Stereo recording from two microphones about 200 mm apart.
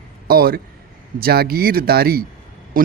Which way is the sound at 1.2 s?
50° right (ahead or behind).